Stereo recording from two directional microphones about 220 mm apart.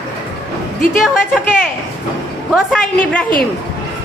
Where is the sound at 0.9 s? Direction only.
5° right (ahead or behind).